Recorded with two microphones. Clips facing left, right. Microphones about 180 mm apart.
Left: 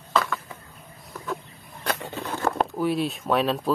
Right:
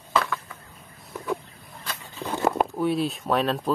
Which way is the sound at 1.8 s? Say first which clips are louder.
Left 10 dB; 75° left (ahead or behind).